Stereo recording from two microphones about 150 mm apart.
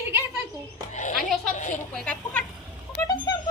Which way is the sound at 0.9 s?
50° left (ahead or behind).